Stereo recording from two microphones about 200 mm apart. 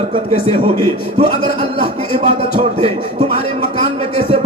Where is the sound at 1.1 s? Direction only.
25° right (ahead or behind).